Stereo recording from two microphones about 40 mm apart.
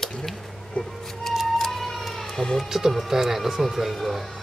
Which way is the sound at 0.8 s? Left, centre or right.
Left.